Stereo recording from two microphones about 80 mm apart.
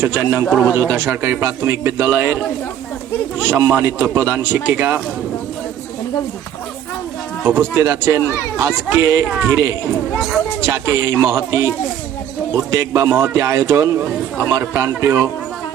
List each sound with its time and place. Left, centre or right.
0.0 s speech: right
7.4 s speech: right
10.2 s speech: centre
10.6 s speech: right